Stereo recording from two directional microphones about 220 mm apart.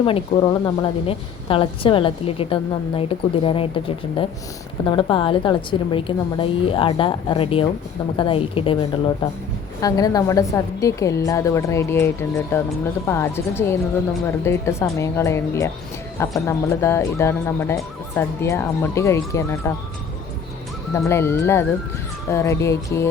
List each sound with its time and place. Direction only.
0.0 s a woman's voice: 20° left (ahead or behind)
20.9 s a woman's voice: 10° left (ahead or behind)